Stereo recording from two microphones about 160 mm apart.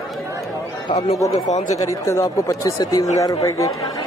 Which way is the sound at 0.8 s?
40° left (ahead or behind).